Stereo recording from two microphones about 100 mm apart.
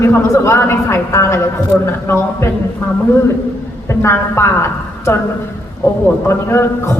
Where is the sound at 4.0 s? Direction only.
25° left (ahead or behind).